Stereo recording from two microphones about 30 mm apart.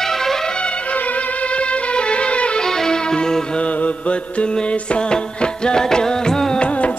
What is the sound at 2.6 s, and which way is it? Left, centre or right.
Music, centre.